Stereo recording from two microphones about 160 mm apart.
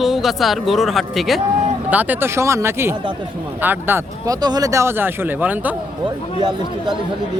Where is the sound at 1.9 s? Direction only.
10° right (ahead or behind).